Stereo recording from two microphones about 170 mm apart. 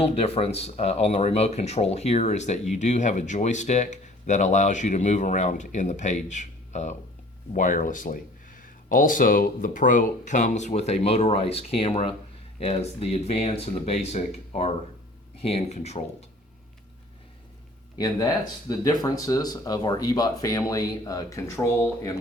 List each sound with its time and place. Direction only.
0.0 s speech: 35° left (ahead or behind)
17.9 s speech: 25° left (ahead or behind)